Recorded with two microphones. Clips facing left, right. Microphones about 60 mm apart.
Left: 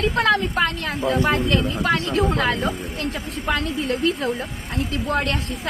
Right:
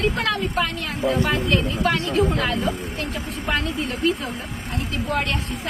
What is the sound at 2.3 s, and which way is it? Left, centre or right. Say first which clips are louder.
Speech: left 2 dB; left.